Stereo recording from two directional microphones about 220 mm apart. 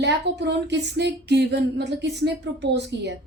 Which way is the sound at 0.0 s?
50° right (ahead or behind).